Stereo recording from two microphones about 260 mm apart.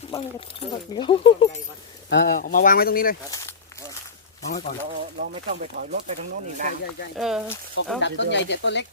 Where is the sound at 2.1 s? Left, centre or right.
Left.